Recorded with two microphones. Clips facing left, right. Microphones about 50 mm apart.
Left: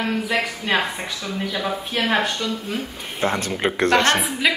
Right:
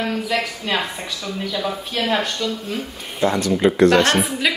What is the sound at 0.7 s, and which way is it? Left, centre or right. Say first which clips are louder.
Speech: left 1 dB; centre.